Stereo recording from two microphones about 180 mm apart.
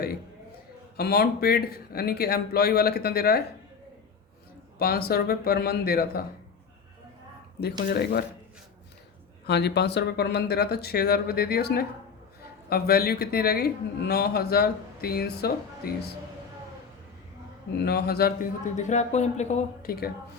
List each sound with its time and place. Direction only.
0.9 s a man's voice: 60° left (ahead or behind)
4.8 s a man's voice: 60° left (ahead or behind)
7.6 s a man's voice: 60° left (ahead or behind)
9.5 s a man's voice: 70° left (ahead or behind)
17.8 s a man's voice: 60° left (ahead or behind)
18.8 s speech: 40° left (ahead or behind)